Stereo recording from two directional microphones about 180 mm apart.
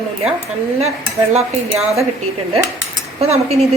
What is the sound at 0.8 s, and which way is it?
Speech, 35° right (ahead or behind).